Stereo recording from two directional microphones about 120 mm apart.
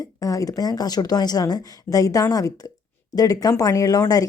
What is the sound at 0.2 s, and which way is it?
A woman's voice, 30° left (ahead or behind).